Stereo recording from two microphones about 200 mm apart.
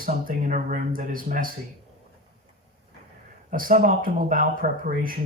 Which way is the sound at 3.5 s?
45° right (ahead or behind).